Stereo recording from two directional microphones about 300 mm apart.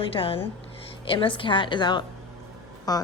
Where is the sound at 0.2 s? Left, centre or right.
Centre.